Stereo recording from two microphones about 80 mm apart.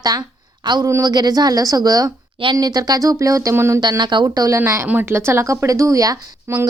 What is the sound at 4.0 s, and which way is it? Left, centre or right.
Speech, right.